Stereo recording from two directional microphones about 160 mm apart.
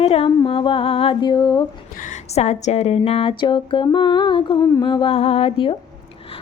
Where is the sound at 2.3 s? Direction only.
45° left (ahead or behind).